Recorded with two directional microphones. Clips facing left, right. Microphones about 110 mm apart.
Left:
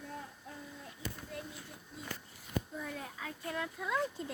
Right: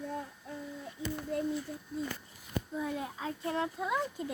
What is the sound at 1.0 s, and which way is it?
Speech, 25° right (ahead or behind).